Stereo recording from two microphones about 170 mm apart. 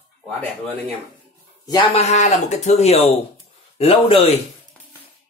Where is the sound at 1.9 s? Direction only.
40° left (ahead or behind).